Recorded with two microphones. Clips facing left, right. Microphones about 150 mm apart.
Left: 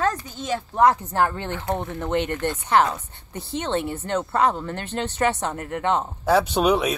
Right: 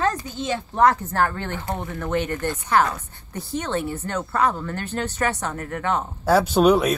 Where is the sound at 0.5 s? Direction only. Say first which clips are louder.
Even; 15° left (ahead or behind).